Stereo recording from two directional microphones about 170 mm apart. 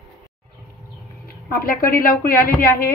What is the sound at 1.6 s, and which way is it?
Speech, 60° left (ahead or behind).